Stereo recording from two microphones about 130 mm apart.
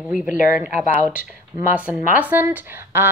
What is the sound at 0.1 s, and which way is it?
Speech, 5° right (ahead or behind).